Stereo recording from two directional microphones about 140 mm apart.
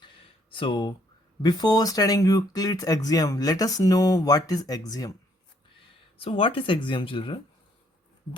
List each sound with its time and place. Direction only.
0.5 s speech: 40° left (ahead or behind)
6.1 s speech: 40° left (ahead or behind)